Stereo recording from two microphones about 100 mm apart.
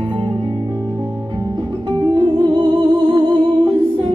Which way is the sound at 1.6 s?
50° right (ahead or behind).